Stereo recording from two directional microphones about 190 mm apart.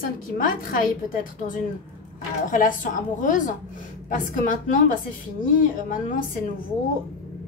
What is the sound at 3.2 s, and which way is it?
Speech, 45° left (ahead or behind).